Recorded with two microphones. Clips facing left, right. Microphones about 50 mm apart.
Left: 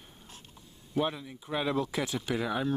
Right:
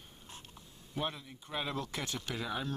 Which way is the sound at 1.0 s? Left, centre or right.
Centre.